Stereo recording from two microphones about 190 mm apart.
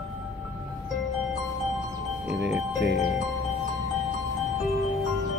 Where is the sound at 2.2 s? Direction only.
5° right (ahead or behind).